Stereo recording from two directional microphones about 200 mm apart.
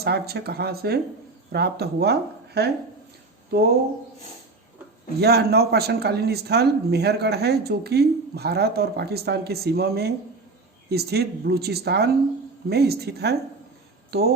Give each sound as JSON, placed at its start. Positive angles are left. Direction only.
{"t": 0.0, "sound": "speech", "side_deg": -50}
{"t": 5.2, "sound": "speech", "side_deg": -55}